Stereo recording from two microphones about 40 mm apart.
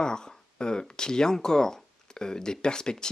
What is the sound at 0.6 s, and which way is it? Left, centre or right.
A man's voice, left.